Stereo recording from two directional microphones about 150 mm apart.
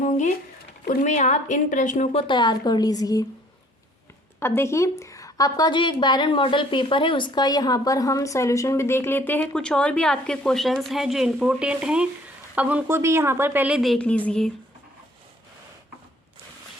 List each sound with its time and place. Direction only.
0.0 s a sound: 55° left (ahead or behind)
0.9 s a woman's voice: 55° left (ahead or behind)
2.1 s a woman's voice: 30° left (ahead or behind)
4.4 s a woman's voice: 15° left (ahead or behind)